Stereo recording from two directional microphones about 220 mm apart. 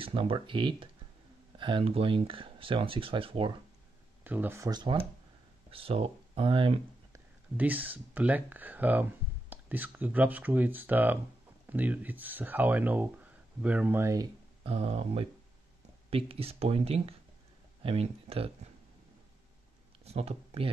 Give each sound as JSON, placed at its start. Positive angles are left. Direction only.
{"t": 0.0, "sound": "speech", "side_deg": -25}
{"t": 4.2, "sound": "speech", "side_deg": -10}
{"t": 7.5, "sound": "speech", "side_deg": -5}
{"t": 20.1, "sound": "speech", "side_deg": -25}